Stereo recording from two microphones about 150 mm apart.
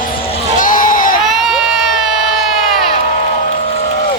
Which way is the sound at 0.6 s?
65° left (ahead or behind).